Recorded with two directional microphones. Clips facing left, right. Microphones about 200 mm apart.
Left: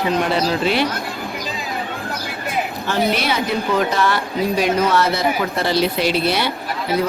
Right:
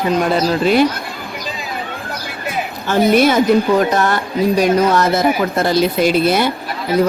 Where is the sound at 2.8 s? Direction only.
45° right (ahead or behind).